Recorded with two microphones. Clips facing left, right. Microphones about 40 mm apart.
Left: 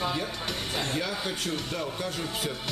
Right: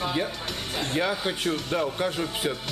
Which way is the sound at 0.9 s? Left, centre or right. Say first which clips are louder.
Right 4 dB; right.